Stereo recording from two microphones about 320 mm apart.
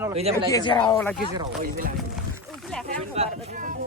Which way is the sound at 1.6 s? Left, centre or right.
Right.